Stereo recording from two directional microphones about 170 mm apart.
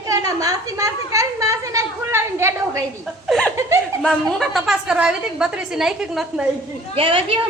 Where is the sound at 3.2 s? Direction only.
Centre (ahead or behind).